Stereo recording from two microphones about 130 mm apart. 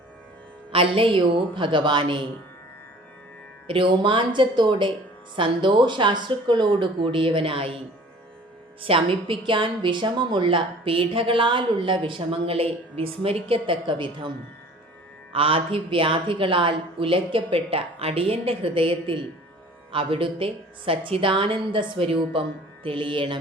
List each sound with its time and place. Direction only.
0.7 s a woman's voice: 45° right (ahead or behind)
3.7 s a woman's voice: 40° right (ahead or behind)
8.8 s a woman's voice: 45° right (ahead or behind)